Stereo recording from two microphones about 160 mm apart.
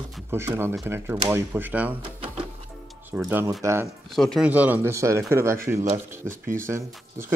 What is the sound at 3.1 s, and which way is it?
Speech, 5° right (ahead or behind).